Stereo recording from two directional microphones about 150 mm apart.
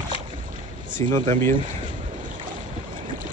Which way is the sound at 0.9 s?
60° right (ahead or behind).